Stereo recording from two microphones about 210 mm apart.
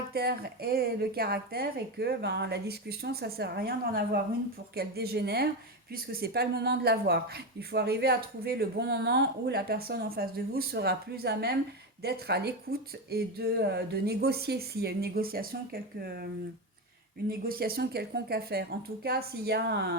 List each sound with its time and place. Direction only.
0.1 s a woman's voice: 50° right (ahead or behind)
17.2 s a woman's voice: 45° right (ahead or behind)